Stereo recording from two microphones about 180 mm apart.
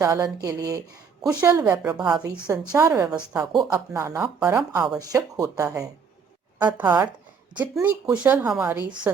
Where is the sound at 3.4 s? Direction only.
20° right (ahead or behind).